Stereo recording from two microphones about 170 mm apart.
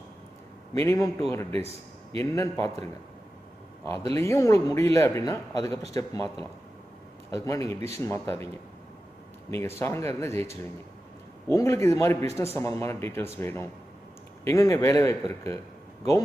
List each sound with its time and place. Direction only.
0.7 s speech: 20° left (ahead or behind)
4.0 s speech: 15° left (ahead or behind)
7.3 s speech: 20° left (ahead or behind)
9.5 s speech: 15° left (ahead or behind)